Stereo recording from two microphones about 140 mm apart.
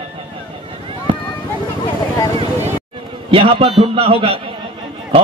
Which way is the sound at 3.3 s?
40° right (ahead or behind).